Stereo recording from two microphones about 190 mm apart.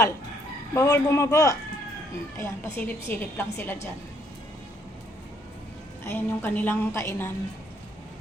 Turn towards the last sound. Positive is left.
turn(degrees=15)  # may be behind; listen again after turning